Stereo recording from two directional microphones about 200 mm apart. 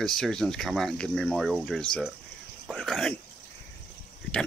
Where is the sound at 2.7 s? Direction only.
Centre (ahead or behind).